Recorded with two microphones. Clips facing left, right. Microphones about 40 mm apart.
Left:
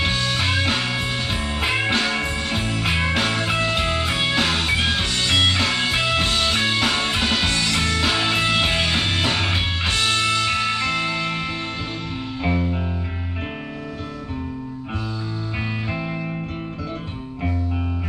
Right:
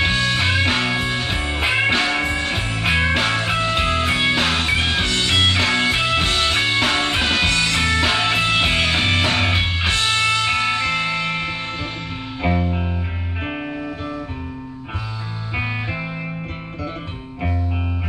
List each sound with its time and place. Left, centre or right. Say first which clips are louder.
0.0 s music: right 3 dB; centre
15.5 s music: right 4 dB; right